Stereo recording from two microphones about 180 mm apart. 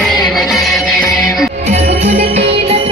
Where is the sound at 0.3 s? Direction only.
Centre (ahead or behind).